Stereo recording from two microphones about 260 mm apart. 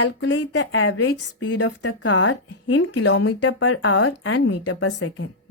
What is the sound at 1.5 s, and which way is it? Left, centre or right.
A woman's voice, left.